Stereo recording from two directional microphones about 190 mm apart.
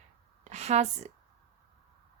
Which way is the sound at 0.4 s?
35° right (ahead or behind).